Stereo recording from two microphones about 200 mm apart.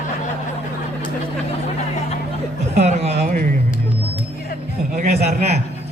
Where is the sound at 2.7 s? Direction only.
35° right (ahead or behind).